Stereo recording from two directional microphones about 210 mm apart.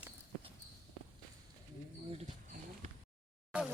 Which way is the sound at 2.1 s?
35° right (ahead or behind).